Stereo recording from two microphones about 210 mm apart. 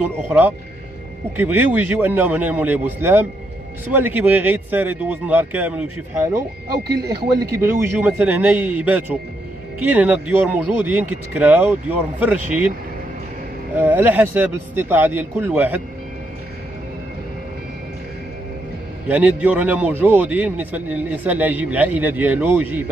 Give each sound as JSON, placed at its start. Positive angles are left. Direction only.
{"t": 0.3, "sound": "a man's voice", "side_deg": -10}
{"t": 13.7, "sound": "a man's voice", "side_deg": -10}
{"t": 19.0, "sound": "a man's voice", "side_deg": -5}